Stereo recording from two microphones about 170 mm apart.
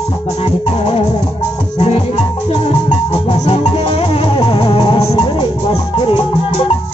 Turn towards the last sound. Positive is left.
turn(degrees=35)  # may be behind; listen again after turning